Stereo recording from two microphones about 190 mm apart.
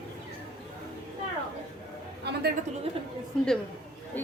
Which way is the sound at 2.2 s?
60° right (ahead or behind).